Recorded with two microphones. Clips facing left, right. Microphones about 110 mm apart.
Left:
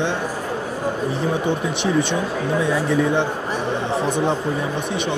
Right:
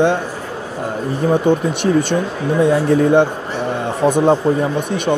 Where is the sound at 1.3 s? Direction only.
50° right (ahead or behind).